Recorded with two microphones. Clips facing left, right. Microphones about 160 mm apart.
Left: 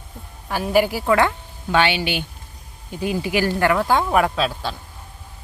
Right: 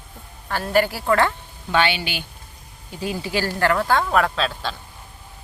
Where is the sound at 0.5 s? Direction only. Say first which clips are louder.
Left 2 dB; 10° left (ahead or behind).